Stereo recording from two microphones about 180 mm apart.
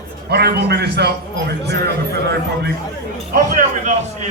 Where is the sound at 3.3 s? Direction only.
45° right (ahead or behind).